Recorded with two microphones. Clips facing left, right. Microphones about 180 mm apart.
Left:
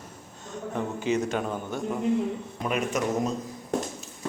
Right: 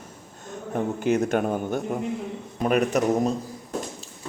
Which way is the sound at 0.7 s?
55° right (ahead or behind).